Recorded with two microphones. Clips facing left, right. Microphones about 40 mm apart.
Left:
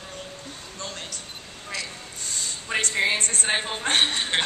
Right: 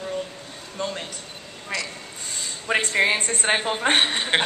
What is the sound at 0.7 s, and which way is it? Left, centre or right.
Speech, centre.